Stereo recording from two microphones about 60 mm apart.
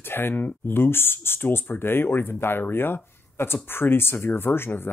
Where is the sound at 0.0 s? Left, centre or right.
Left.